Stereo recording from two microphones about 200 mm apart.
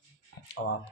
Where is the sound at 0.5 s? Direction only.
55° left (ahead or behind).